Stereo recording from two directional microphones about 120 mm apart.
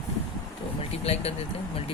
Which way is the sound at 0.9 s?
55° left (ahead or behind).